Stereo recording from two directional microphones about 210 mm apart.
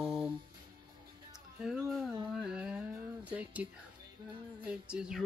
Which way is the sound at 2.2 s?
5° right (ahead or behind).